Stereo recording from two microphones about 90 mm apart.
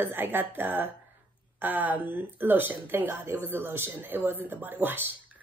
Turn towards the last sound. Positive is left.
turn(degrees=-20)  # may be behind; listen again after turning